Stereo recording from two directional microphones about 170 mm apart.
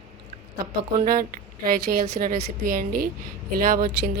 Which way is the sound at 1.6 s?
55° right (ahead or behind).